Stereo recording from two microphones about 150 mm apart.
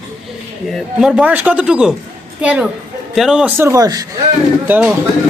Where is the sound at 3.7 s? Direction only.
25° right (ahead or behind).